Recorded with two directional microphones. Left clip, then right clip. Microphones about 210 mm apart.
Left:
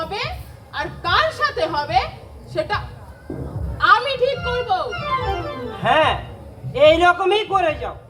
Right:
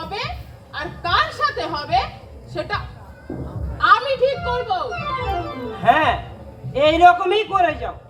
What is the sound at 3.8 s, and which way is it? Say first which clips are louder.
A man's voice: even; 20° left (ahead or behind).